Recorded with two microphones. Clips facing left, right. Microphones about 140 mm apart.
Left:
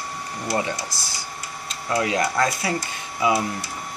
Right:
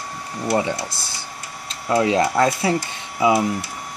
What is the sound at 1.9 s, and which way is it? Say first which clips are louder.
Speech: right 5 dB; 25° right (ahead or behind).